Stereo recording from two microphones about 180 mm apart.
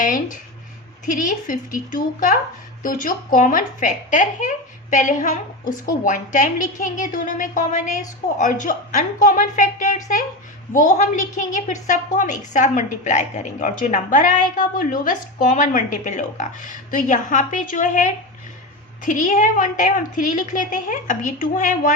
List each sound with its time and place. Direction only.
0.0 s speech: 45° left (ahead or behind)